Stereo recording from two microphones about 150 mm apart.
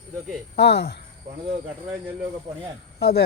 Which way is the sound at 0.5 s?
90° left.